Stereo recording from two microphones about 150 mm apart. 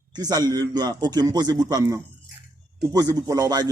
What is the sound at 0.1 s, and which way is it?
Speech, 25° right (ahead or behind).